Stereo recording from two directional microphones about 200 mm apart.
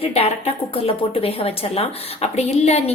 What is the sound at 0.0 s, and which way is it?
A woman's voice, 30° left (ahead or behind).